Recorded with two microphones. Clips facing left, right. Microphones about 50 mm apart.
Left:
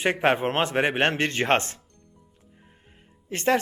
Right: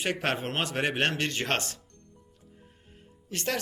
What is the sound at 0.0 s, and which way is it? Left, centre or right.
Speech, left.